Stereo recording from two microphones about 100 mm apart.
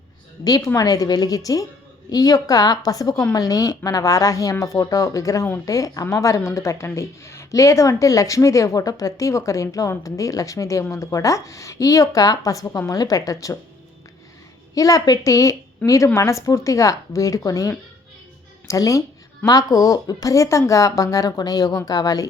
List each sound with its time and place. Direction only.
0.4 s speech: 40° left (ahead or behind)
14.8 s speech: 35° left (ahead or behind)